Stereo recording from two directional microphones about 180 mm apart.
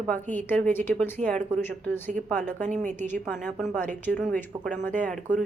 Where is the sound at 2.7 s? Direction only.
40° right (ahead or behind).